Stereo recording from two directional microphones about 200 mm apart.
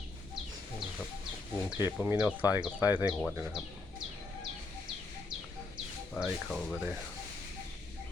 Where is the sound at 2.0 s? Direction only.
5° right (ahead or behind).